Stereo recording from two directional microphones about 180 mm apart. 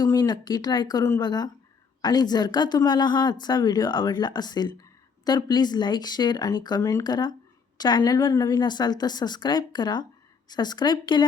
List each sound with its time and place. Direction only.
0.0 s speech: 20° left (ahead or behind)